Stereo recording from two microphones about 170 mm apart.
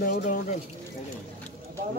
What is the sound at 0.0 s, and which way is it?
Speech, 55° left (ahead or behind).